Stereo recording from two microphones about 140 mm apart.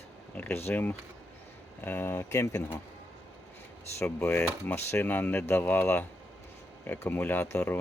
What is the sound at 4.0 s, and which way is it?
Speech, 10° left (ahead or behind).